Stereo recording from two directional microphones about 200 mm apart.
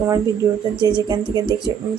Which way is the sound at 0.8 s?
20° right (ahead or behind).